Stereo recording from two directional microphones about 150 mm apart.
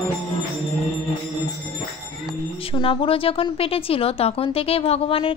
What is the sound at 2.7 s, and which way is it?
A woman's voice, 35° left (ahead or behind).